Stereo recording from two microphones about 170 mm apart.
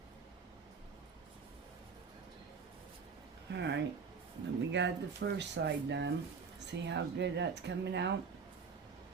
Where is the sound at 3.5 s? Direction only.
90° right.